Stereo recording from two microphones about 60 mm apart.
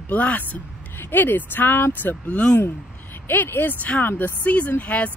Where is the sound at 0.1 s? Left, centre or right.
Left.